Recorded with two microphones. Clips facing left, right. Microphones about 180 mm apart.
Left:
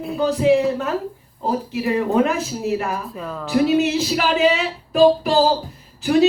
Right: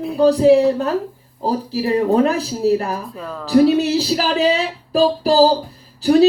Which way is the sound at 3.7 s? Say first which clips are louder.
Right 1 dB; 35° right (ahead or behind).